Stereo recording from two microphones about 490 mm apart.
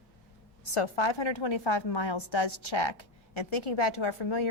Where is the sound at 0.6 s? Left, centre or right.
Left.